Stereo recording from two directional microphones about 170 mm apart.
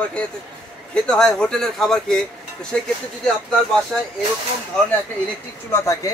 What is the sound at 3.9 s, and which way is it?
Speech, centre (ahead or behind).